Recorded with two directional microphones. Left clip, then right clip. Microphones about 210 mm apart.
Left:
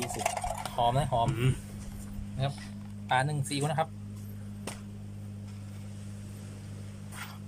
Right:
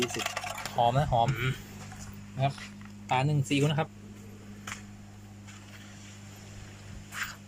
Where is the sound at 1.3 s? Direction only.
30° left (ahead or behind).